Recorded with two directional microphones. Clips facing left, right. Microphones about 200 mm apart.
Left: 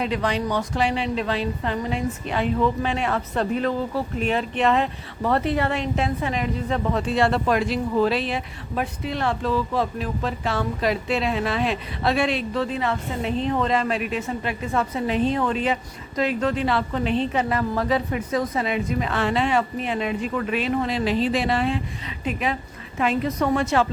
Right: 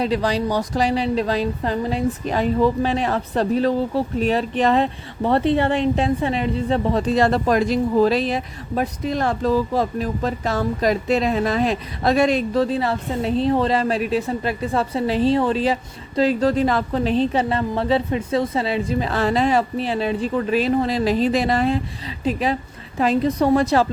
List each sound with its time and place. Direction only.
0.0 s speech: 35° right (ahead or behind)